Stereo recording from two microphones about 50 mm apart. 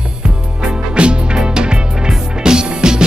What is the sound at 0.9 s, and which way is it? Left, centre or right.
Music, centre.